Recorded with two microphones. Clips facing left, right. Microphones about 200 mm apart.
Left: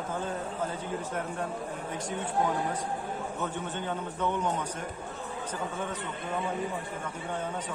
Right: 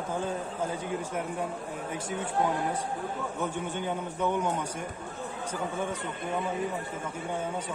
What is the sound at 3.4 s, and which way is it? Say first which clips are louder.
A man's voice: right 4 dB; 10° right (ahead or behind).